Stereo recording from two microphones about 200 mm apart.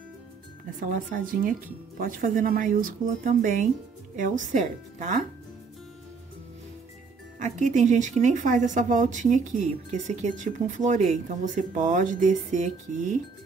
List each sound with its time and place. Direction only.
0.7 s speech: 45° right (ahead or behind)
7.3 s speech: 40° right (ahead or behind)